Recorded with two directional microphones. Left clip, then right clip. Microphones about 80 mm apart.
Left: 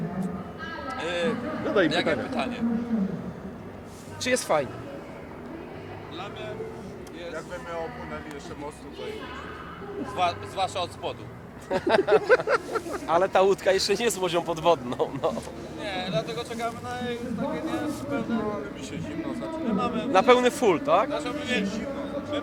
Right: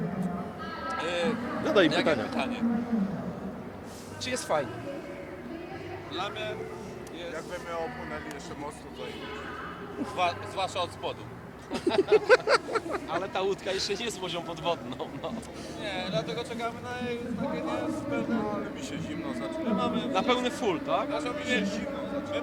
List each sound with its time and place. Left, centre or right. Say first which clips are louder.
0.9 s speech: left 2 dB; centre
1.6 s speech: even; right
1.9 s a man's voice: left 1 dB; centre
4.2 s speech: left 8 dB; left
6.1 s speech: right 4 dB; right
7.3 s speech: left 1 dB; centre
10.2 s a man's voice: left 3 dB; centre
11.7 s speech: left 3 dB; left
12.5 s speech: even; centre
13.1 s speech: left 14 dB; left
15.8 s a man's voice: left 3 dB; centre
20.1 s speech: left 10 dB; left
21.1 s a man's voice: left 1 dB; centre